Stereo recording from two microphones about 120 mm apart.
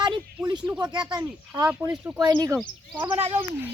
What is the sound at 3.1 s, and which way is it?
Speech, 60° right (ahead or behind).